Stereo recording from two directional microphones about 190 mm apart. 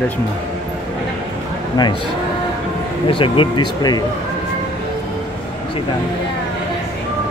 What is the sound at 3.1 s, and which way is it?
Speech, 25° left (ahead or behind).